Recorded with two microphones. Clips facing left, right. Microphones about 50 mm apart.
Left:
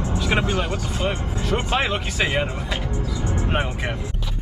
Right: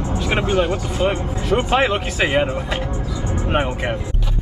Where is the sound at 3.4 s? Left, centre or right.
Centre.